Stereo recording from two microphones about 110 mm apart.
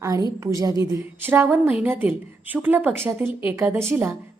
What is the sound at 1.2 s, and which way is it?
A woman's voice, 20° right (ahead or behind).